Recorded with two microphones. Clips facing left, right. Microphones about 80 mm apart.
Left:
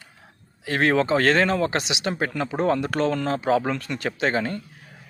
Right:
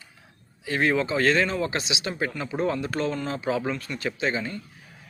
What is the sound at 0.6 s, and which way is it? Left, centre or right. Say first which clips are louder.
Speech: left 3 dB; left.